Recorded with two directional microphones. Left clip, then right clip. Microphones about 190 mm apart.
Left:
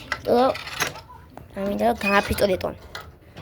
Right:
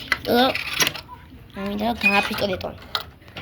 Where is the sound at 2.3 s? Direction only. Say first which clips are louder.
Left 3 dB; 30° left (ahead or behind).